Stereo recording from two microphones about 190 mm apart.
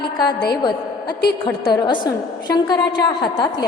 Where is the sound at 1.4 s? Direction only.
20° left (ahead or behind).